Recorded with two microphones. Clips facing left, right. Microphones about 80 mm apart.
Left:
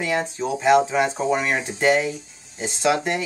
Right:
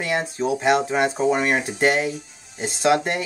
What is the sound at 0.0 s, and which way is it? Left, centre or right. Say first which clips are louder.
Speech: right 1 dB; centre.